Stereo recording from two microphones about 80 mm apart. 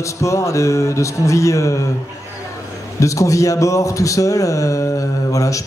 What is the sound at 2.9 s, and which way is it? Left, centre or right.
Speech, left.